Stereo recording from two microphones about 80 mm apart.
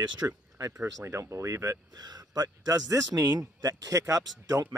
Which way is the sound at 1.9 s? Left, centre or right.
Right.